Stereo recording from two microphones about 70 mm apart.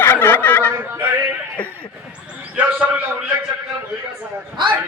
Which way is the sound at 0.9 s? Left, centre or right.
Right.